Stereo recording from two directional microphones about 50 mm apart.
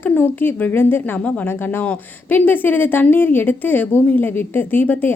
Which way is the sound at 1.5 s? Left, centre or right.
Left.